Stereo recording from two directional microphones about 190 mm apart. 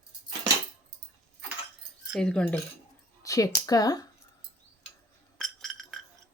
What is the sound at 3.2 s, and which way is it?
Speech, 15° left (ahead or behind).